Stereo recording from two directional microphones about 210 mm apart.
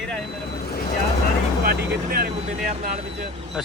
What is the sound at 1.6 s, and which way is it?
Vehicle, 50° right (ahead or behind).